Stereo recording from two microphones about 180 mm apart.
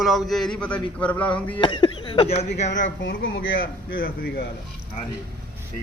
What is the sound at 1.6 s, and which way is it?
Speech, 25° left (ahead or behind).